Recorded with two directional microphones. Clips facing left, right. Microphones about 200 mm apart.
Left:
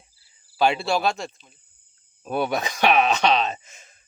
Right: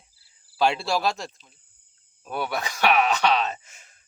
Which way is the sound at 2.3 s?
20° left (ahead or behind).